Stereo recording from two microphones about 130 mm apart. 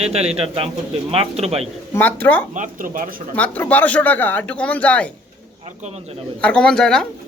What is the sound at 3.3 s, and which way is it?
Speech, 10° left (ahead or behind).